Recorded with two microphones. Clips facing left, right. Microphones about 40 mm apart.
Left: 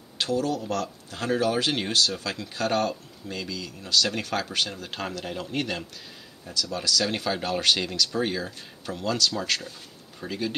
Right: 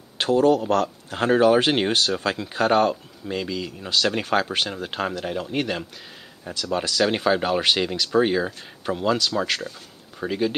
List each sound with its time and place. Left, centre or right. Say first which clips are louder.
0.2 s speech: right 8 dB; right; by 5.9 s centre
6.4 s speech: right 4 dB; right